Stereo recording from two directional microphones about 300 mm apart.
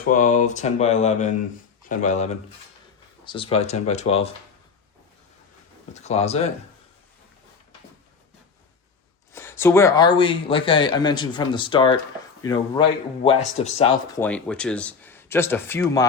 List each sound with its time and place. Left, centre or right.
0.1 s speech: left
5.9 s speech: left
9.3 s speech: centre
14.2 s speech: centre